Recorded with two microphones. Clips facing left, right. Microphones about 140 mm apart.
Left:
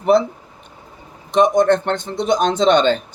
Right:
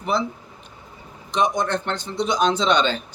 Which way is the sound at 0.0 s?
55° left (ahead or behind).